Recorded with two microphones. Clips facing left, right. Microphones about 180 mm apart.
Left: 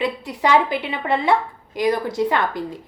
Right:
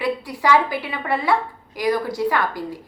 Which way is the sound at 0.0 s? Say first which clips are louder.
Even; 20° left (ahead or behind).